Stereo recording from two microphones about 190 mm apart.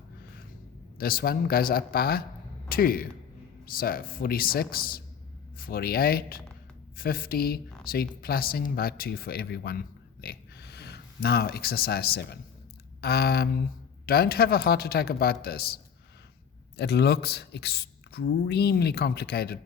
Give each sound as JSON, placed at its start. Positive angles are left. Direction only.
{"t": 0.9, "sound": "a man's voice", "side_deg": 50}
{"t": 16.7, "sound": "speech", "side_deg": 60}